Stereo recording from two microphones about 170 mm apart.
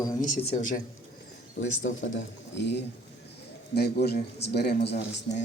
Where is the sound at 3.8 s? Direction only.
70° left (ahead or behind).